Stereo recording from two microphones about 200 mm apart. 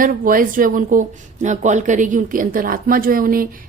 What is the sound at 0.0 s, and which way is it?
Speech, 45° right (ahead or behind).